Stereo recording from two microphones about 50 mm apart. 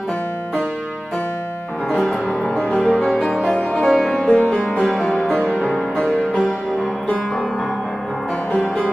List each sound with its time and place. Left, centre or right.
1.9 s music: centre
2.6 s music: left
3.0 s music: centre
3.5 s music: centre
3.9 s music: centre
4.2 s music: left
4.7 s music: centre